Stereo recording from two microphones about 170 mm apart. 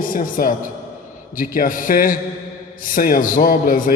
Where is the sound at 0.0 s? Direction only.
55° left (ahead or behind).